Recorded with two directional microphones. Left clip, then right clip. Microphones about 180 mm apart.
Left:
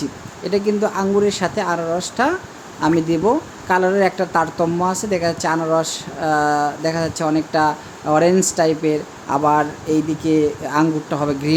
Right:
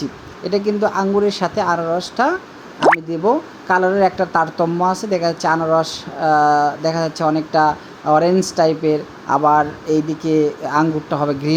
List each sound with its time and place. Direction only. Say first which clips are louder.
0.4 s speech: right 1 dB; 5° right (ahead or behind)